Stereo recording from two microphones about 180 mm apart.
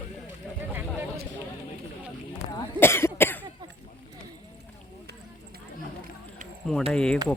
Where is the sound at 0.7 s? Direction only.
10° right (ahead or behind).